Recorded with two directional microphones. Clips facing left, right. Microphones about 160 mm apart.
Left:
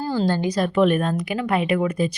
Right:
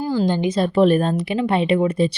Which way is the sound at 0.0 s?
15° right (ahead or behind).